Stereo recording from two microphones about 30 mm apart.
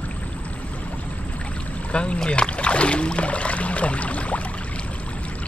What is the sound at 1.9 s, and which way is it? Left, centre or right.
Rowboat, left.